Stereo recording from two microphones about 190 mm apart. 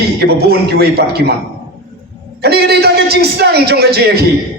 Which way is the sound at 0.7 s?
60° right (ahead or behind).